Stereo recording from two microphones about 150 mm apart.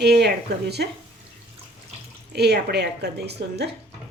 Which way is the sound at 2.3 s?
90° right.